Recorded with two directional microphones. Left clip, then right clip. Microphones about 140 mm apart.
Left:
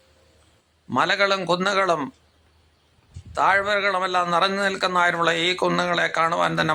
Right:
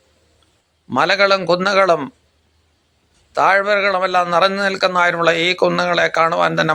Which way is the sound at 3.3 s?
20° right (ahead or behind).